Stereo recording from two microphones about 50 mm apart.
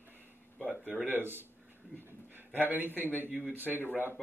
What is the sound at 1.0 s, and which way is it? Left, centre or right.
A man's voice, right.